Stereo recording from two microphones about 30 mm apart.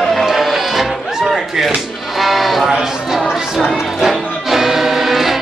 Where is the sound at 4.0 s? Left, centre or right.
Centre.